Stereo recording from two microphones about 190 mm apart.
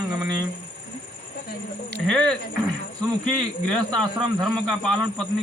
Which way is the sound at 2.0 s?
5° left (ahead or behind).